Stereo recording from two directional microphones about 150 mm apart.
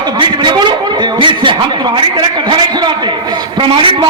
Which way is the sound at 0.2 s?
30° right (ahead or behind).